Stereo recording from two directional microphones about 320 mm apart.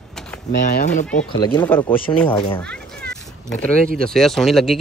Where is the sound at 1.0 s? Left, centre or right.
Centre.